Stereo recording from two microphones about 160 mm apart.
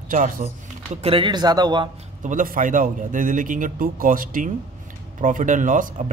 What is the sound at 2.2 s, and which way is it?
A man's voice, 55° right (ahead or behind).